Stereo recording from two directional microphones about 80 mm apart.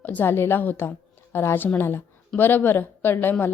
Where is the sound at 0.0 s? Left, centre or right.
Left.